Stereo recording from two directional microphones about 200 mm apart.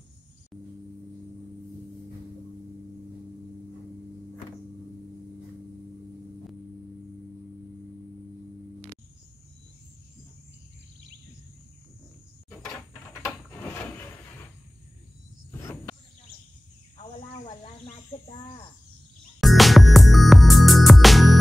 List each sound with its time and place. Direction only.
13.5 s a sound: 10° left (ahead or behind)
15.5 s cricket: 10° left (ahead or behind)
17.0 s cricket: 25° left (ahead or behind)
19.4 s music: centre (ahead or behind)